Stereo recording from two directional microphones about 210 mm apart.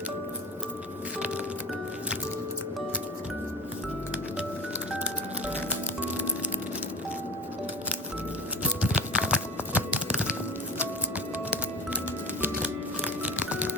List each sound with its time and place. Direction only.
4.9 s music: 5° right (ahead or behind)
8.8 s music: 5° right (ahead or behind)
13.2 s music: 5° right (ahead or behind)